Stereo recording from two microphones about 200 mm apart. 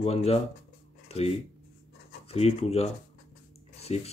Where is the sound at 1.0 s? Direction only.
30° left (ahead or behind).